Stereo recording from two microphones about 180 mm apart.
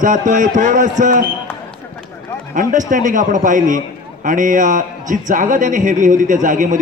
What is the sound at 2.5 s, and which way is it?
A man's voice, 45° right (ahead or behind).